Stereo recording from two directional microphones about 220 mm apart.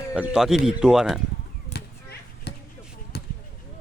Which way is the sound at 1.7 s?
30° left (ahead or behind).